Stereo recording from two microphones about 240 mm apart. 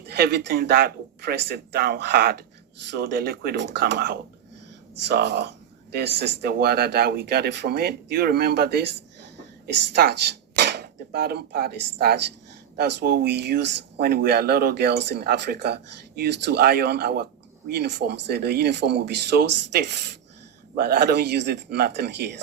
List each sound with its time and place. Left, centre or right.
0.1 s speech: right
9.9 s speech: right